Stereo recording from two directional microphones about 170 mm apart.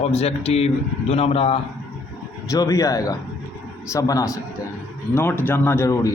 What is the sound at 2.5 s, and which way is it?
A man's voice, 20° left (ahead or behind).